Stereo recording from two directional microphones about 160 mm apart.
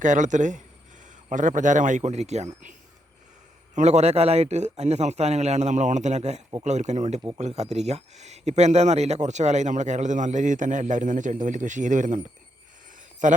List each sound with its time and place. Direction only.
0.0 s speech: 50° right (ahead or behind)
3.8 s speech: 45° right (ahead or behind)
13.0 s a sound: 55° right (ahead or behind)